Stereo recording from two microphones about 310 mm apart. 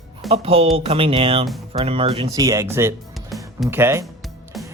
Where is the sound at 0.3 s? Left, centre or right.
Centre.